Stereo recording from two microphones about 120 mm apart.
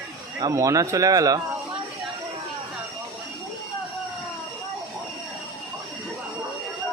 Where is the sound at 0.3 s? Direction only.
30° right (ahead or behind).